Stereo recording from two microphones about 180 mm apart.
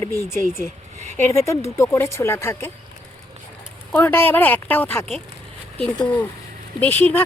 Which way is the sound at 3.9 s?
10° left (ahead or behind).